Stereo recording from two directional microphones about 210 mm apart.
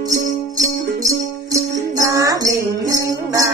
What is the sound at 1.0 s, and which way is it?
Music, 15° right (ahead or behind).